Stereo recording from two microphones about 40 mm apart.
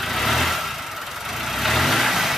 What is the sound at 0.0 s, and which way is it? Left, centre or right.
Vehicle, centre.